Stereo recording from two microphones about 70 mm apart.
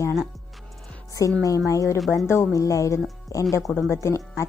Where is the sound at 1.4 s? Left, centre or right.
Left.